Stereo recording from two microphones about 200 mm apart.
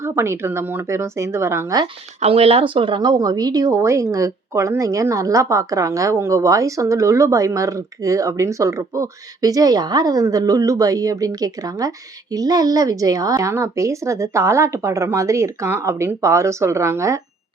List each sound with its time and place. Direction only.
0.0 s speech: 15° right (ahead or behind)
2.2 s speech: 30° right (ahead or behind); by 17.2 s 15° right (ahead or behind)